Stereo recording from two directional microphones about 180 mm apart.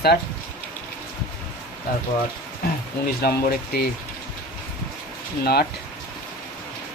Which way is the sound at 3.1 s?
60° left (ahead or behind).